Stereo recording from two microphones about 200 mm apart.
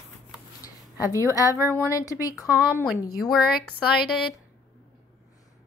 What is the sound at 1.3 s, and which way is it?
Speech, 15° left (ahead or behind).